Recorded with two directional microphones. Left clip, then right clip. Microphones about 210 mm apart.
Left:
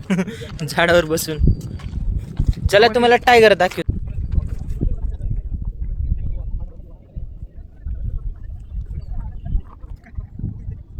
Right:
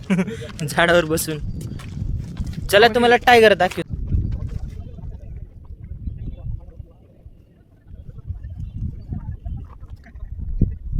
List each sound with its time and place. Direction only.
0.1 s speech: 10° left (ahead or behind)
1.7 s a sound: 25° right (ahead or behind)
2.5 s speech: centre (ahead or behind)